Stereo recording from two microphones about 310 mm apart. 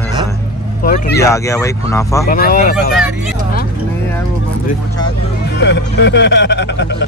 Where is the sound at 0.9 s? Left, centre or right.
Left.